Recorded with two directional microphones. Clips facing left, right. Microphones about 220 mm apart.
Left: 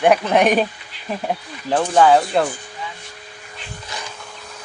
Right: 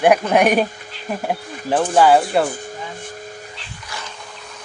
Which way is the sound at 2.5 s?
45° right (ahead or behind).